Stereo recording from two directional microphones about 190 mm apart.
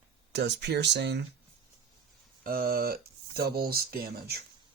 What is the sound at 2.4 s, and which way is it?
Speech, 50° right (ahead or behind).